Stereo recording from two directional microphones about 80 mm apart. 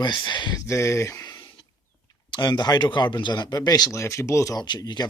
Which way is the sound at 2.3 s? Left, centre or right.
Left.